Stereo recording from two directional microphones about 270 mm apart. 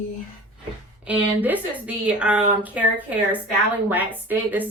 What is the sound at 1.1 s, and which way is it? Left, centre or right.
A woman's voice, centre.